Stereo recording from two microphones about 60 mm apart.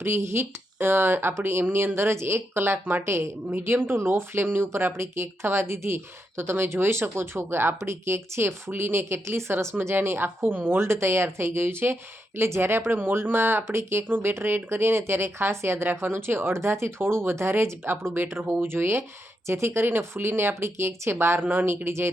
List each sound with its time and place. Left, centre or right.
0.0 s a woman's voice: right
3.5 s speech: right
9.9 s a woman's voice: right
21.4 s a woman's voice: right